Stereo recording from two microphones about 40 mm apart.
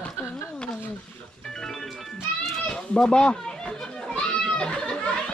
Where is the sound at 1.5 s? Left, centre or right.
Centre.